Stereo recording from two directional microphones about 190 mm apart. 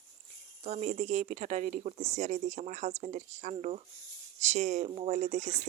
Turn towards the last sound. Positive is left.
turn(degrees=-35)  # may be behind; listen again after turning